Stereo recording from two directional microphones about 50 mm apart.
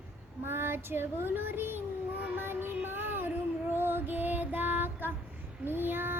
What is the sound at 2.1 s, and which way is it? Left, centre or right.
Music, right.